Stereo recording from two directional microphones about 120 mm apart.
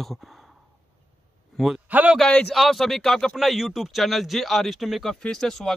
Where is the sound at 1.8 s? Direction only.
15° right (ahead or behind).